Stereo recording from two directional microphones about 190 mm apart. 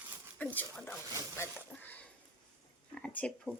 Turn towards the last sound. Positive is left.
turn(degrees=5)  # may be behind; listen again after turning